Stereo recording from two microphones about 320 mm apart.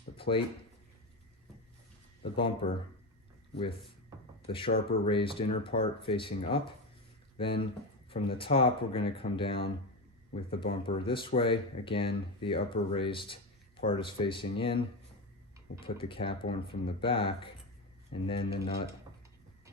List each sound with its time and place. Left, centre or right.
0.2 s speech: centre
2.2 s speech: centre
4.4 s speech: centre